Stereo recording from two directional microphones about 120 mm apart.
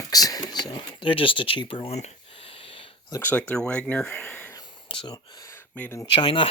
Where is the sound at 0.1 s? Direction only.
30° left (ahead or behind); by 2.0 s 55° left (ahead or behind).